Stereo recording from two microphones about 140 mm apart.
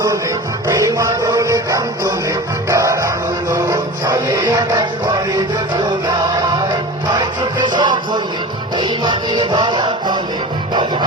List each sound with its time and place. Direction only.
0.7 s music: 25° right (ahead or behind)
6.7 s music: 30° right (ahead or behind)